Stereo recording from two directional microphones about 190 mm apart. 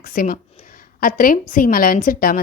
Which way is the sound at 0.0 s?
50° left (ahead or behind).